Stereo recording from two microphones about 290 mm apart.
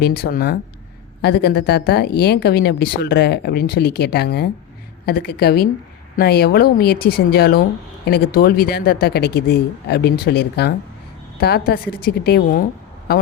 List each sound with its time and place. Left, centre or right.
0.0 s speech: left